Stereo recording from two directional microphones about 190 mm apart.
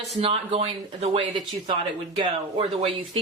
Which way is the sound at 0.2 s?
30° right (ahead or behind).